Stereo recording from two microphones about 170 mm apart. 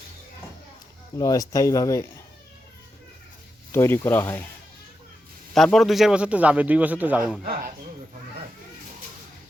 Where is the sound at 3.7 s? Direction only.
15° left (ahead or behind).